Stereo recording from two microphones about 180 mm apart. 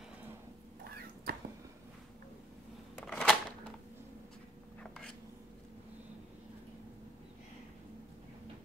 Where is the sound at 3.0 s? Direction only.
5° left (ahead or behind).